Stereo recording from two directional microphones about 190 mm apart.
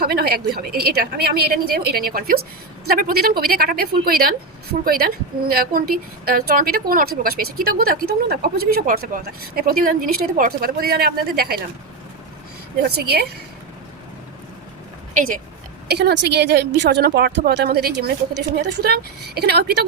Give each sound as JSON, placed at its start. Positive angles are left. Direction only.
{"t": 0.0, "sound": "a woman's voice", "side_deg": -55}
{"t": 15.9, "sound": "speech", "side_deg": -60}